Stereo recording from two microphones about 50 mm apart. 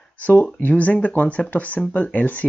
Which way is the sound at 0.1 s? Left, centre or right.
Left.